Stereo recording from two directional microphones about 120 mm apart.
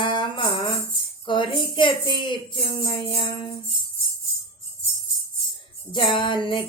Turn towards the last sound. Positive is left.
turn(degrees=40)  # may be behind; listen again after turning